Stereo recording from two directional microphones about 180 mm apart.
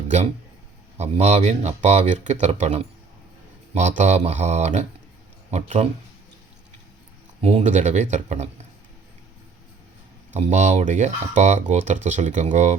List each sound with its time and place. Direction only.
0.9 s speech: 35° right (ahead or behind)
7.4 s speech: 40° right (ahead or behind)
10.3 s speech: 40° right (ahead or behind)